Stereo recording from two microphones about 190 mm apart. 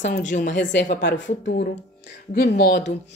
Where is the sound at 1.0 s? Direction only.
70° left (ahead or behind).